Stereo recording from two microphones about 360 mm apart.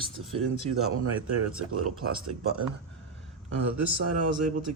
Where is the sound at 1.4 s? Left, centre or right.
Right.